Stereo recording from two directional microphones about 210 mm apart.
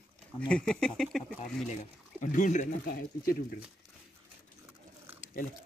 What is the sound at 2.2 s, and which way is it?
Speech, 35° left (ahead or behind).